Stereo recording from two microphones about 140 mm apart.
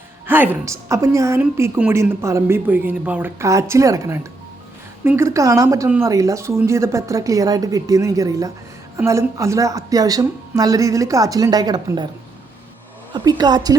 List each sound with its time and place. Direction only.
0.3 s a woman's voice: 15° right (ahead or behind); by 12.0 s 30° right (ahead or behind)
13.1 s a woman's voice: 30° right (ahead or behind)